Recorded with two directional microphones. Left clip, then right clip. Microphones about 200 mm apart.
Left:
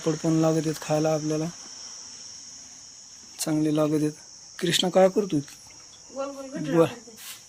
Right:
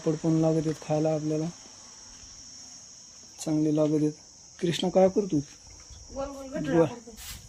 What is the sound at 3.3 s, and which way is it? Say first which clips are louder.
Cricket: left 2 dB; centre (ahead or behind).